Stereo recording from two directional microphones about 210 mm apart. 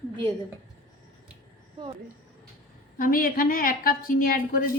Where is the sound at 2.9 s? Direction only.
40° left (ahead or behind).